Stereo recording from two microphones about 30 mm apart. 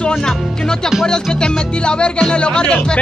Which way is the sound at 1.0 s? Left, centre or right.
Left.